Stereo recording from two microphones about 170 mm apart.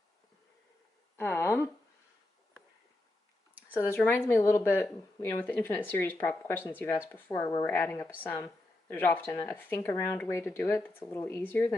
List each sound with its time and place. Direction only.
1.1 s speech: 15° left (ahead or behind)
3.7 s a woman's voice: 15° left (ahead or behind)